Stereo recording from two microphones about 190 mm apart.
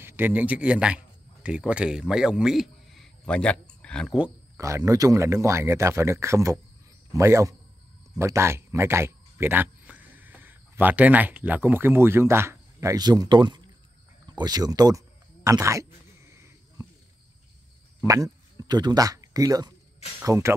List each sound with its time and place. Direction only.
0.0 s a man's voice: 10° right (ahead or behind)
4.6 s speech: 15° right (ahead or behind)
14.3 s a sound: 20° right (ahead or behind)
18.0 s speech: 20° right (ahead or behind)